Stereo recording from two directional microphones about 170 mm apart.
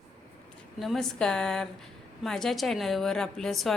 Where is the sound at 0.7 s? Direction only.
Centre (ahead or behind).